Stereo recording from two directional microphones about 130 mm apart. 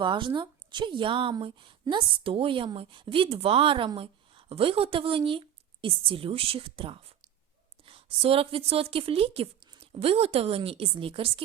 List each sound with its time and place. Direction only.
0.0 s a woman's voice: 40° right (ahead or behind)